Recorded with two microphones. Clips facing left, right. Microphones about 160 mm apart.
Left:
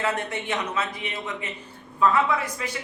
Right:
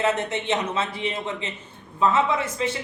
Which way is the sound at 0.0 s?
20° right (ahead or behind).